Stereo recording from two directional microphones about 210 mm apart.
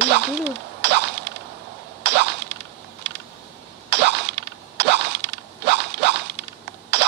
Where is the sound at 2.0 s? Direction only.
55° right (ahead or behind).